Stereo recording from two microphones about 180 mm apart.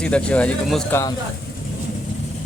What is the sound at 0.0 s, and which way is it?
Speech, 5° left (ahead or behind).